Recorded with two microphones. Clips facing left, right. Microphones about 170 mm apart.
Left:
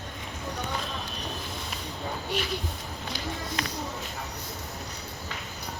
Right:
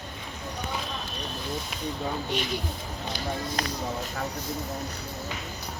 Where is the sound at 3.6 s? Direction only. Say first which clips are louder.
Right 2 dB; 40° right (ahead or behind).